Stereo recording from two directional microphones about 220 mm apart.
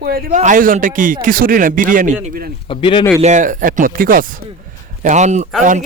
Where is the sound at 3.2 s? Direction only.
35° right (ahead or behind).